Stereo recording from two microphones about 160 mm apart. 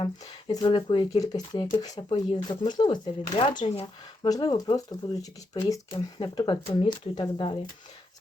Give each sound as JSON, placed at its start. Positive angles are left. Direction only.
{"t": 0.0, "sound": "speech", "side_deg": 30}